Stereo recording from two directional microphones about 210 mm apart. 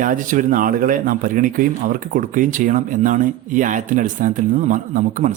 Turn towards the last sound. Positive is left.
turn(degrees=-40)  # may be behind; listen again after turning